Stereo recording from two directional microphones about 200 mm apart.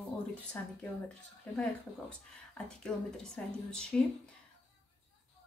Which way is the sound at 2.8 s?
5° left (ahead or behind).